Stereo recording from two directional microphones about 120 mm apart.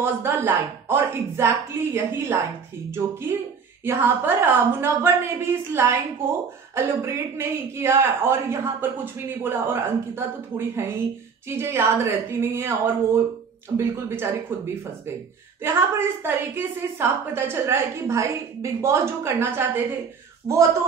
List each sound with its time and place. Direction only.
0.0 s a woman's voice: 20° right (ahead or behind)
15.6 s a woman's voice: 20° right (ahead or behind)
20.5 s a woman's voice: 25° right (ahead or behind)